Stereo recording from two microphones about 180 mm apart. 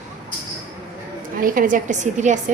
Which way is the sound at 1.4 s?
50° right (ahead or behind).